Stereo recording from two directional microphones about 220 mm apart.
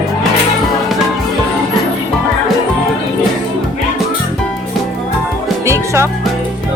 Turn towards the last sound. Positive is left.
turn(degrees=-10)  # may be behind; listen again after turning